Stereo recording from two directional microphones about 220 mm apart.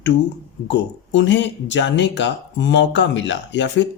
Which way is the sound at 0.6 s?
55° left (ahead or behind).